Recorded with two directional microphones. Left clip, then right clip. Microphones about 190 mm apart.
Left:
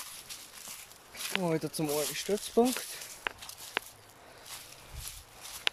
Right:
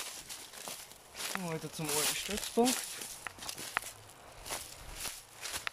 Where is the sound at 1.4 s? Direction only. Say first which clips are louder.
Left 8 dB; 25° left (ahead or behind).